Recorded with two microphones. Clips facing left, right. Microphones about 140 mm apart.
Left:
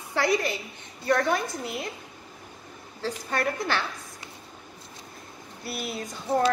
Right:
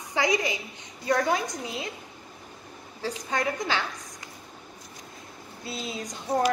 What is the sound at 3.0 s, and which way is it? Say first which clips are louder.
Speech: left 1 dB; 15° right (ahead or behind).